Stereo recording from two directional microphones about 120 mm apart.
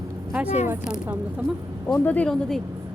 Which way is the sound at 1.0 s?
15° right (ahead or behind).